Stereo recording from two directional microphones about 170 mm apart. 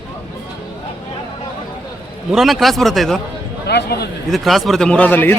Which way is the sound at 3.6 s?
70° left (ahead or behind).